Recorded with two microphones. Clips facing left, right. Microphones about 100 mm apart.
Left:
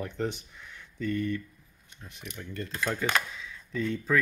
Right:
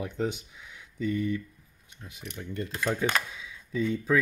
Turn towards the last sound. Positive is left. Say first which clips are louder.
# right 2 dB
turn(degrees=-5)  # may be behind; listen again after turning